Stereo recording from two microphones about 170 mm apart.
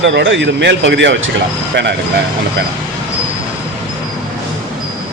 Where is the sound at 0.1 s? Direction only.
90° right.